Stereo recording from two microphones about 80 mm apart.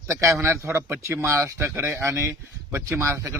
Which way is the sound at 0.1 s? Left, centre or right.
Right.